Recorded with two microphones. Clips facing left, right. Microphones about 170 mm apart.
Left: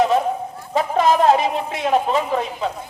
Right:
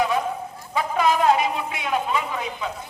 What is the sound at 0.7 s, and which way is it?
A woman's voice, 35° left (ahead or behind).